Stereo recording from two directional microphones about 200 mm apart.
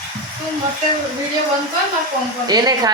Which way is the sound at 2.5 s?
20° right (ahead or behind).